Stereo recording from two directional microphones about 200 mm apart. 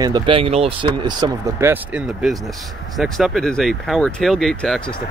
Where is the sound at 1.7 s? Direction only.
5° right (ahead or behind).